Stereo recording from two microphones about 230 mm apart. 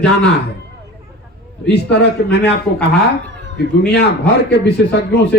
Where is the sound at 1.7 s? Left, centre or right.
Left.